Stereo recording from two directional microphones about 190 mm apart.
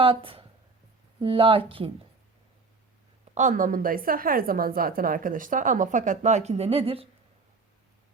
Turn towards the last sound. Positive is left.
turn(degrees=-30)  # may be behind; listen again after turning